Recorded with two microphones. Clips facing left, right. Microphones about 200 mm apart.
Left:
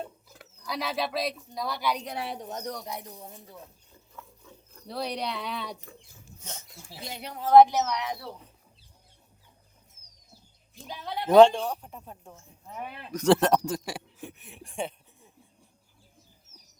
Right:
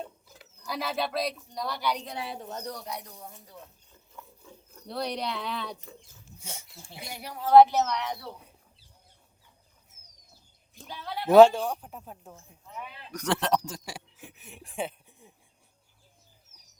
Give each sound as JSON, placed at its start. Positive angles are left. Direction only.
{"t": 0.6, "sound": "a woman's voice", "side_deg": 0}
{"t": 2.3, "sound": "speech", "side_deg": 15}
{"t": 4.1, "sound": "a sound", "side_deg": -5}
{"t": 6.4, "sound": "speech", "side_deg": -10}
{"t": 7.0, "sound": "speech", "side_deg": 20}
{"t": 10.8, "sound": "speech", "side_deg": 15}
{"t": 11.3, "sound": "a woman's voice", "side_deg": -5}
{"t": 12.7, "sound": "speech", "side_deg": 55}
{"t": 13.1, "sound": "speech", "side_deg": 30}
{"t": 13.4, "sound": "speech", "side_deg": 55}
{"t": 14.3, "sound": "a woman's voice", "side_deg": 0}